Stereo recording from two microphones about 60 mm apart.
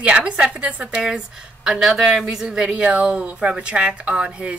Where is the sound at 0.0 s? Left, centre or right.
Centre.